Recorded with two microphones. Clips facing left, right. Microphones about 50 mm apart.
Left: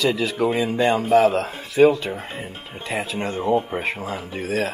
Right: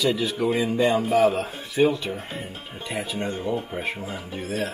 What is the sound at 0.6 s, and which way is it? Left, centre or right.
Speech, left.